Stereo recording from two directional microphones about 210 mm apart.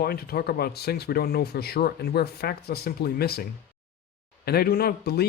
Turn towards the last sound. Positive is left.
turn(degrees=50)  # may be behind; listen again after turning